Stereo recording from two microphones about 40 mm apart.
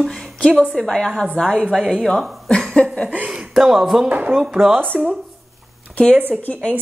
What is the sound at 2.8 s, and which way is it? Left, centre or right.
Chuckle, left.